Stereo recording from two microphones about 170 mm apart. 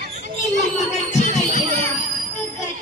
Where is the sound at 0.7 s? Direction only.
45° left (ahead or behind).